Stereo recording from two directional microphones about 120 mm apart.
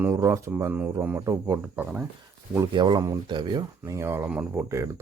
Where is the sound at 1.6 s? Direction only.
10° right (ahead or behind).